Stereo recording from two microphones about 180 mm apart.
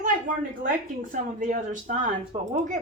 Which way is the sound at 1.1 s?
45° right (ahead or behind).